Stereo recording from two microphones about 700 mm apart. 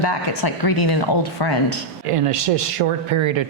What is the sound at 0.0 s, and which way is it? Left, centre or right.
Speech, left.